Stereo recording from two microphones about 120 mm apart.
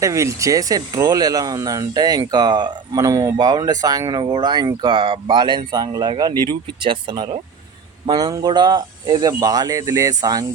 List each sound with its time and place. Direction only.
0.0 s speech: 25° right (ahead or behind)